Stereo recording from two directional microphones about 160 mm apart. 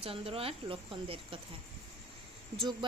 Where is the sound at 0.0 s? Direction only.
35° right (ahead or behind).